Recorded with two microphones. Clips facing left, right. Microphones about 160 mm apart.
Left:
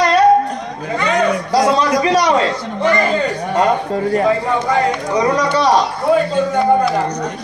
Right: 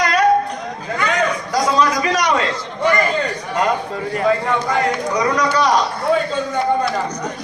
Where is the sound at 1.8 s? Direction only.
30° left (ahead or behind).